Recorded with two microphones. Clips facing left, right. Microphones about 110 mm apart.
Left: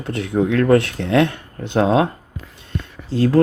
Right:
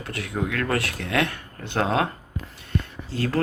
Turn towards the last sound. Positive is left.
turn(degrees=20)  # may be behind; listen again after turning